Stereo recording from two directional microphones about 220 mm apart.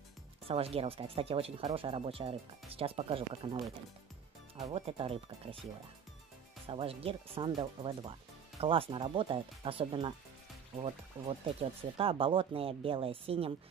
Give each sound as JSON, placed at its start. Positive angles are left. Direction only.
{"t": 0.5, "sound": "speech", "side_deg": -25}
{"t": 4.7, "sound": "speech", "side_deg": -25}
{"t": 6.7, "sound": "speech", "side_deg": -25}